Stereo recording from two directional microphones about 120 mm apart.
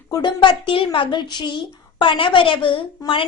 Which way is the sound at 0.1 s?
40° left (ahead or behind).